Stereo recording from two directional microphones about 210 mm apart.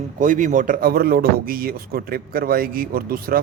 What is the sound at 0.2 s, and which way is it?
A man's voice, 40° right (ahead or behind).